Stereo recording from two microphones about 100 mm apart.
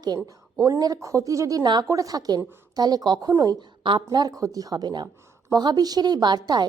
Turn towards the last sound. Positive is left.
turn(degrees=-45)  # may be behind; listen again after turning